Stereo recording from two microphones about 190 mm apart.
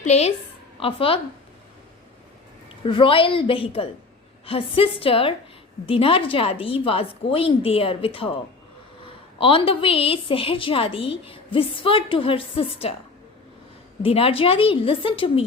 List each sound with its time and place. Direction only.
0.0 s a woman's voice: 35° left (ahead or behind)
2.8 s a woman's voice: 25° left (ahead or behind)
14.0 s a woman's voice: 30° left (ahead or behind)